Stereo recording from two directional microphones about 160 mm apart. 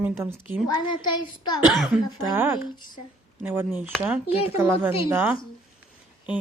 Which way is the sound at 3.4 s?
15° right (ahead or behind).